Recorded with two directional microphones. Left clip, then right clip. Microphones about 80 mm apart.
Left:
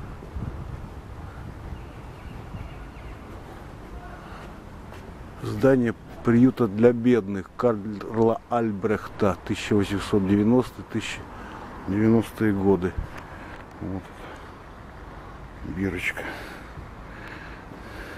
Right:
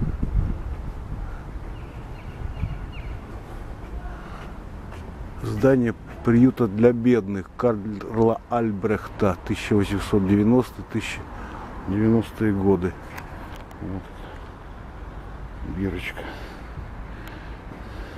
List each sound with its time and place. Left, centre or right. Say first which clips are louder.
5.4 s a man's voice: right 1 dB; centre
11.9 s a man's voice: even; centre
15.8 s speech: left 2 dB; left